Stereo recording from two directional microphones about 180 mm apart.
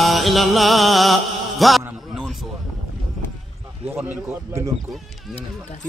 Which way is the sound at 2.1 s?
Centre (ahead or behind).